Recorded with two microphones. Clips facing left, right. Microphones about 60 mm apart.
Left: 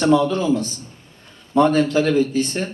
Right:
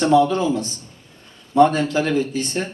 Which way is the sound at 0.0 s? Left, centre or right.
Centre.